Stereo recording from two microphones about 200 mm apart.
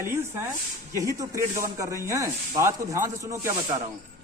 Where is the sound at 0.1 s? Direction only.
10° right (ahead or behind).